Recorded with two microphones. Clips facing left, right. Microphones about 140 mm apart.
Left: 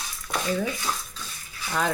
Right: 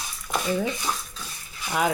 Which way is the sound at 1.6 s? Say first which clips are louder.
Right 2 dB; 15° right (ahead or behind).